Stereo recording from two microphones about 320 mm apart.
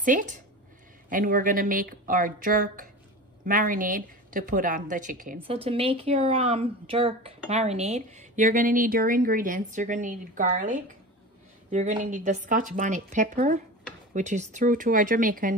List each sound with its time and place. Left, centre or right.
0.0 s a woman's voice: right